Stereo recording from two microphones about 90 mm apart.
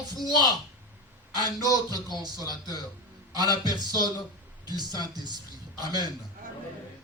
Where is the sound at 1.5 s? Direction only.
45° right (ahead or behind).